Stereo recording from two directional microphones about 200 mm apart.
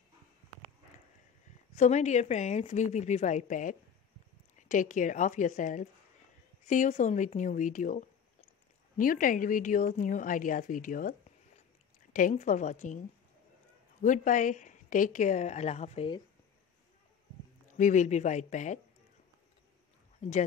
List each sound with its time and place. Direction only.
1.8 s a woman's voice: 35° left (ahead or behind)
14.0 s a woman's voice: 40° left (ahead or behind)
17.6 s a woman's voice: 40° left (ahead or behind)
20.2 s speech: 35° left (ahead or behind)